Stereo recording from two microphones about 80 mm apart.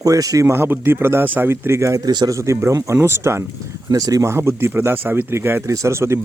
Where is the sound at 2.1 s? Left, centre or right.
Right.